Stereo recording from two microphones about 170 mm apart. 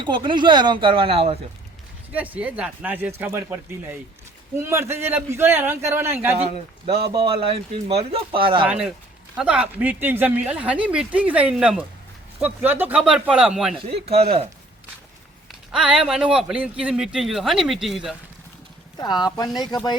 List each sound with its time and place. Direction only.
0.0 s speech: 30° right (ahead or behind)
2.1 s speech: 10° right (ahead or behind)
6.3 s speech: 35° right (ahead or behind)
8.6 s speech: 5° right (ahead or behind)
13.9 s speech: 35° right (ahead or behind)
15.7 s speech: 5° right (ahead or behind)
18.9 s speech: 25° left (ahead or behind)